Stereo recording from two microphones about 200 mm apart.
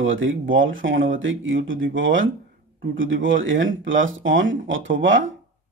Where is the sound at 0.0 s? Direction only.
75° right (ahead or behind).